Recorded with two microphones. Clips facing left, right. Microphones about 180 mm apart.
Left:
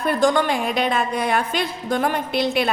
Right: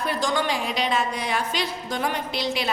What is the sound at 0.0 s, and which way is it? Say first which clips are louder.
A woman's voice: left 6 dB; 55° left (ahead or behind).